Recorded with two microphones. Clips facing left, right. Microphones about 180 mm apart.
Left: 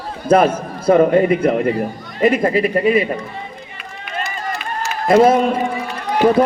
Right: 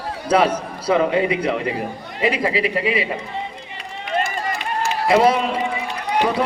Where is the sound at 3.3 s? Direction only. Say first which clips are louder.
Right 2 dB; 25° right (ahead or behind).